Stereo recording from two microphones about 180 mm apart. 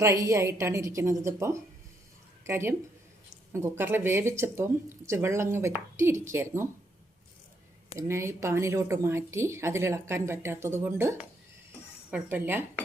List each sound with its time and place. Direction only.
0.0 s a woman's voice: 15° right (ahead or behind)
7.9 s speech: 15° right (ahead or behind)